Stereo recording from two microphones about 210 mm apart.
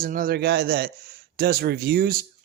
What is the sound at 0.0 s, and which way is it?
Speech, 45° right (ahead or behind).